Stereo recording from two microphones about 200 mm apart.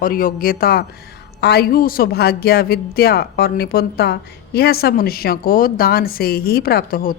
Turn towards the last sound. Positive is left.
turn(degrees=45)  # may be behind; listen again after turning